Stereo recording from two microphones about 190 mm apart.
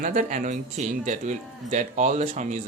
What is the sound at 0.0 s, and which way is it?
Speech, 45° right (ahead or behind).